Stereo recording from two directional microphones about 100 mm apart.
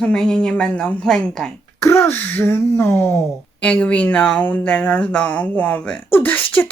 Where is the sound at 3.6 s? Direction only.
10° left (ahead or behind).